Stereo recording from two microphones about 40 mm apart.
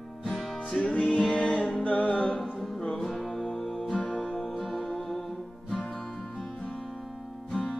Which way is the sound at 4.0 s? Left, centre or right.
Left.